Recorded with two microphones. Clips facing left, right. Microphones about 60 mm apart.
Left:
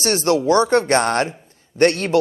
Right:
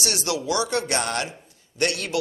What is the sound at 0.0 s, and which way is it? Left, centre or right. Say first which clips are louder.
Speech: left 9 dB; left.